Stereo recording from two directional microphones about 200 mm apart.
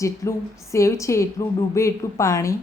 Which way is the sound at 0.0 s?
15° left (ahead or behind).